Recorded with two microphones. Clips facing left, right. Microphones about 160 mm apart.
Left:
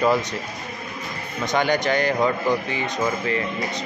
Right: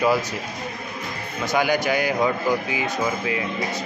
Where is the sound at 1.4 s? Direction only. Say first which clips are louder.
Even; 5° right (ahead or behind).